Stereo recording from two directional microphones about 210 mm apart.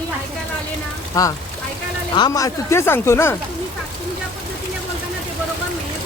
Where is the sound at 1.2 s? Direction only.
15° left (ahead or behind).